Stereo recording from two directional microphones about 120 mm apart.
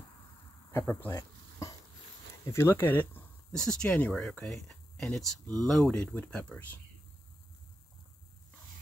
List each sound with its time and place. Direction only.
0.7 s speech: 20° left (ahead or behind)
1.1 s a sound: 30° left (ahead or behind)
2.4 s speech: 20° left (ahead or behind)